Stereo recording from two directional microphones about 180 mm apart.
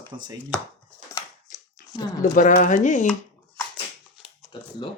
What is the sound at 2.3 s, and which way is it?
Speech, 45° left (ahead or behind).